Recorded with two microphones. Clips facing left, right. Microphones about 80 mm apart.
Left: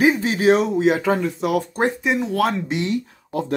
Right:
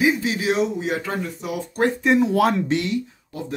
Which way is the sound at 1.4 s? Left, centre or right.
Left.